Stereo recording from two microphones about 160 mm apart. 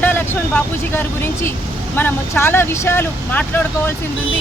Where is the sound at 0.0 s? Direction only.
10° left (ahead or behind).